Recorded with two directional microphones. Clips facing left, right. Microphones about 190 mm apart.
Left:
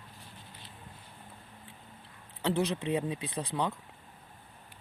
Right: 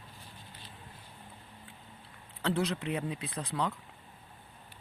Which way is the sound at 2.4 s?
20° left (ahead or behind).